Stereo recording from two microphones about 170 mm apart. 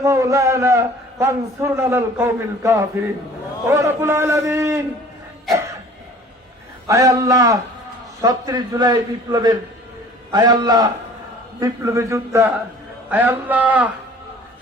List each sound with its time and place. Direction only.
0.0 s a man's voice: 15° right (ahead or behind)
6.8 s a man's voice: 20° right (ahead or behind)